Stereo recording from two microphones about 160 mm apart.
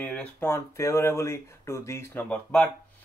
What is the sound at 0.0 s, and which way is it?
Speech, 10° left (ahead or behind).